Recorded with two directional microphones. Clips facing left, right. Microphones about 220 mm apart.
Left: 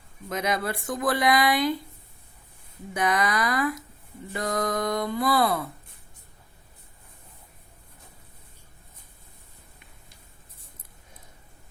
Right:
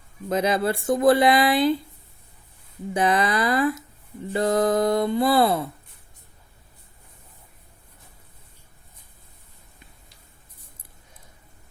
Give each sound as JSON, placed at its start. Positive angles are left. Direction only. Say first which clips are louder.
{"t": 0.3, "sound": "speech", "louder": "right 6 dB", "side_deg": -30}
{"t": 2.9, "sound": "speech", "louder": "right 4 dB", "side_deg": -30}